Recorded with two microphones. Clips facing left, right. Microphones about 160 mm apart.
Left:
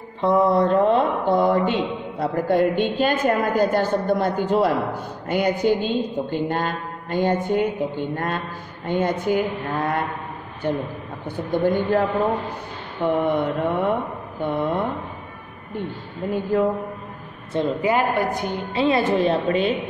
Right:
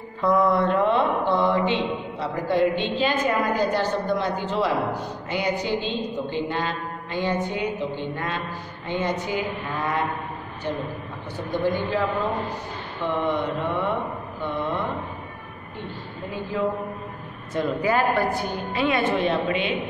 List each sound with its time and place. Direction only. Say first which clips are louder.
0.2 s speech: left 3 dB; 30° left (ahead or behind); by 10.0 s 50° left (ahead or behind)
11.2 s speech: left 4 dB; 50° left (ahead or behind)
13.0 s speech: left 4 dB; 55° left (ahead or behind)
16.5 s a man's voice: left 5 dB; 55° left (ahead or behind)
17.5 s a woman's voice: left 2 dB; 25° left (ahead or behind); by 19.7 s 40° left (ahead or behind)